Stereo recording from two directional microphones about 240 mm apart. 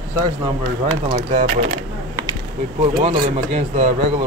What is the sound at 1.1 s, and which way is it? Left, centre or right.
Speech, right.